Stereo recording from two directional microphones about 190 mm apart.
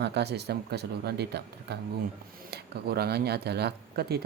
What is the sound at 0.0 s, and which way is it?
Speech, 60° right (ahead or behind).